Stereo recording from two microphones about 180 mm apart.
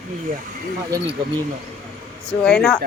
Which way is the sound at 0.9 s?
20° right (ahead or behind).